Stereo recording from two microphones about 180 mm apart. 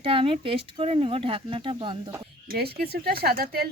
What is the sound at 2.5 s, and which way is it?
Speech, 60° right (ahead or behind).